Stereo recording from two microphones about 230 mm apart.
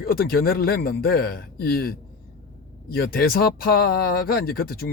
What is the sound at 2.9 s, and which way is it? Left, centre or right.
Speech, left.